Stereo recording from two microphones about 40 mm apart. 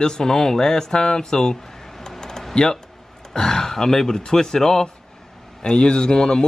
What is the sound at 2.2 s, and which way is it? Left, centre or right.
Typing, centre.